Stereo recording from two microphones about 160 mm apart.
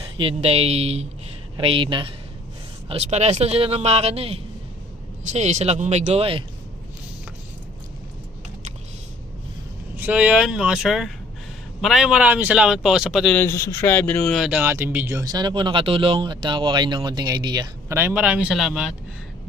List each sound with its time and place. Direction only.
0.2 s speech: 40° right (ahead or behind)
2.9 s speech: 45° right (ahead or behind)
10.0 s speech: 10° right (ahead or behind)
13.3 s speech: 15° left (ahead or behind); by 14.6 s centre (ahead or behind)
14.6 s speech: 15° right (ahead or behind)